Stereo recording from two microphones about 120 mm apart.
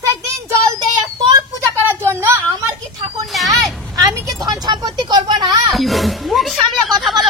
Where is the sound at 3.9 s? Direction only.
30° right (ahead or behind).